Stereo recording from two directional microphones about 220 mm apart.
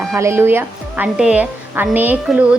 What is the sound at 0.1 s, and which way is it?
A woman's voice, 10° right (ahead or behind).